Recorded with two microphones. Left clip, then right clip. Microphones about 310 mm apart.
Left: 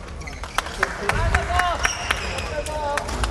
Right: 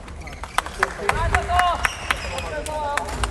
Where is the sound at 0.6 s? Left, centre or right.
Centre.